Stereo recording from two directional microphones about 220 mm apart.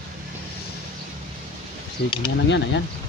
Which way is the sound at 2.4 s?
55° left (ahead or behind).